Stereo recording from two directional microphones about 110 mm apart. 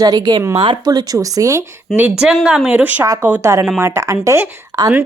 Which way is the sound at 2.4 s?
5° right (ahead or behind).